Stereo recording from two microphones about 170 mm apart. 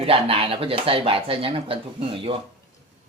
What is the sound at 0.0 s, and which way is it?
Speech, 35° right (ahead or behind).